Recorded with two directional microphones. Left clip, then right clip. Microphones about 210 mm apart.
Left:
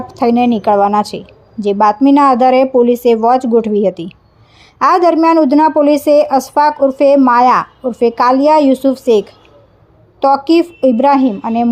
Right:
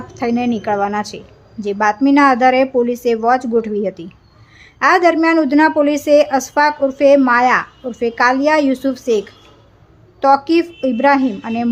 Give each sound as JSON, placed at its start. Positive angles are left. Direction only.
{"t": 0.1, "sound": "speech", "side_deg": 20}